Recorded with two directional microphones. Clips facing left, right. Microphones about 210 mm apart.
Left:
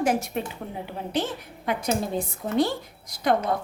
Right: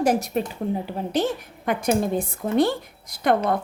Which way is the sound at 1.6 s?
55° right (ahead or behind).